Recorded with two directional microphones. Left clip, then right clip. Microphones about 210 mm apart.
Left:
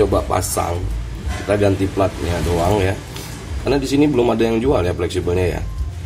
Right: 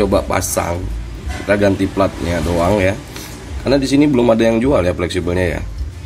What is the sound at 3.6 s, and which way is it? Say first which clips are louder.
Speech: right 3 dB; 35° right (ahead or behind).